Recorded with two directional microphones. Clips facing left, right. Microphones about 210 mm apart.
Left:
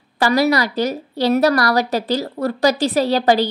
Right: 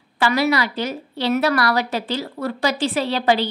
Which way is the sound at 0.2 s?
40° left (ahead or behind).